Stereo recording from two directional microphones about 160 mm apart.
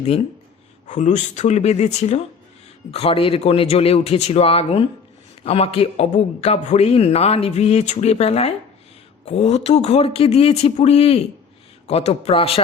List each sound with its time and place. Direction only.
0.9 s a man's voice: 50° left (ahead or behind)